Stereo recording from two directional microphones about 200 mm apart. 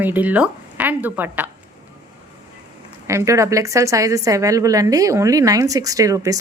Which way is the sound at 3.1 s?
15° right (ahead or behind).